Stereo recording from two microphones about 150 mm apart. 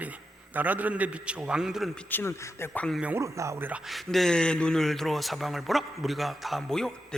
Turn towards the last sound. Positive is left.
turn(degrees=5)  # may be behind; listen again after turning